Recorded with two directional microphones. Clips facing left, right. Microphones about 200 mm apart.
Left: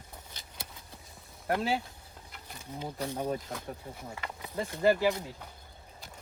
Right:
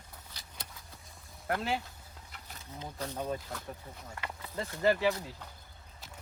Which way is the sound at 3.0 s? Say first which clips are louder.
Left 2 dB; 10° left (ahead or behind).